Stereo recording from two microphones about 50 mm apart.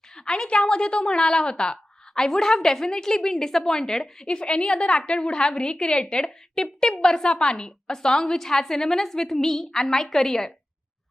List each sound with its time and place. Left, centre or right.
0.2 s a woman's voice: centre